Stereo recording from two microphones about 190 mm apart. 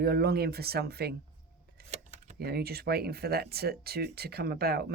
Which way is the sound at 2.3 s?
55° right (ahead or behind).